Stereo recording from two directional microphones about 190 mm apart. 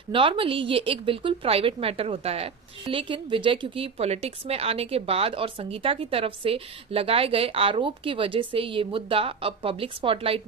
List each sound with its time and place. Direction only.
0.1 s a woman's voice: 25° right (ahead or behind)